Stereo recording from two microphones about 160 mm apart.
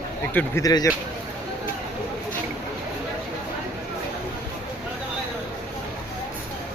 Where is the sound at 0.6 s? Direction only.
20° left (ahead or behind).